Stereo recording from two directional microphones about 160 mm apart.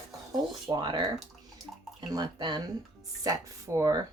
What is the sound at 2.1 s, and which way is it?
A woman's voice, 25° right (ahead or behind).